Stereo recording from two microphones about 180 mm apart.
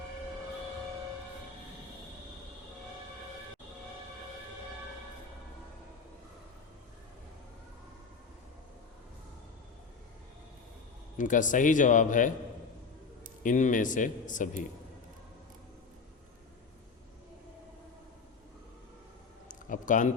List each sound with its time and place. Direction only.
11.2 s speech: 45° left (ahead or behind)
13.4 s speech: 45° left (ahead or behind)
19.5 s a sound: 45° left (ahead or behind)